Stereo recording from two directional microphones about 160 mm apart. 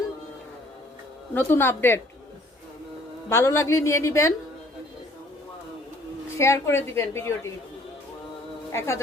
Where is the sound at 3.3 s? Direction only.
15° left (ahead or behind).